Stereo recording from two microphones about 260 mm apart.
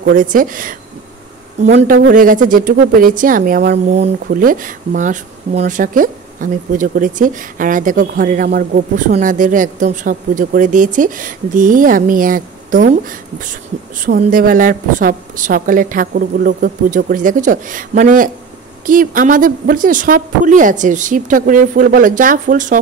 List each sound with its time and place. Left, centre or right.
0.0 s speech: right